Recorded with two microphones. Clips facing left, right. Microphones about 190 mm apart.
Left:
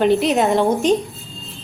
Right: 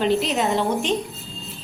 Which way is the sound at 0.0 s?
55° left (ahead or behind).